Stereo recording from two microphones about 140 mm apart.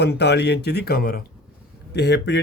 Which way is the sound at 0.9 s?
90° left.